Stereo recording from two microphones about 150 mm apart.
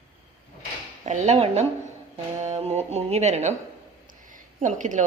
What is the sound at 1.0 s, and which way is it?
Speech, 50° right (ahead or behind).